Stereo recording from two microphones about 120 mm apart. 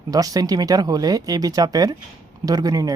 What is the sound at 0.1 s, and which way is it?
Speech, 30° right (ahead or behind).